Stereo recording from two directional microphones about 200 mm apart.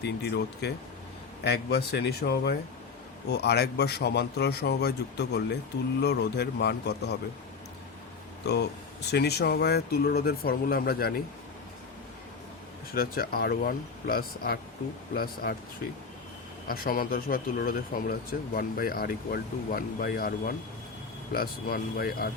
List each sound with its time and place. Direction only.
0.0 s a man's voice: 55° left (ahead or behind)
8.4 s speech: 55° left (ahead or behind)
12.9 s speech: 50° left (ahead or behind)
16.6 s speech: 50° left (ahead or behind)